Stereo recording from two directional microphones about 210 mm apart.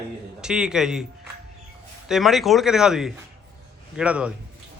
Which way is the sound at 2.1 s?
Centre (ahead or behind).